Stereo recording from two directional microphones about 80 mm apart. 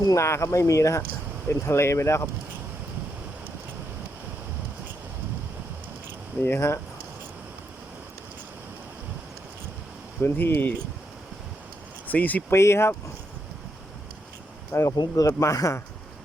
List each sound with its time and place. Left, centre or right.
0.0 s speech: left
0.3 s speech: left
6.4 s speech: left
10.2 s speech: left
12.0 s speech: left
12.5 s speech: left
14.7 s speech: left